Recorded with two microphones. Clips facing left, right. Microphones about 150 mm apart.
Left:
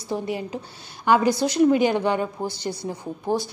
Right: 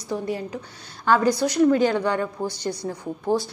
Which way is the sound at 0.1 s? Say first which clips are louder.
Even; 20° left (ahead or behind).